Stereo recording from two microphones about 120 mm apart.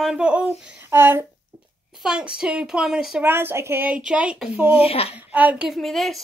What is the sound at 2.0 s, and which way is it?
A woman's voice, 5° right (ahead or behind).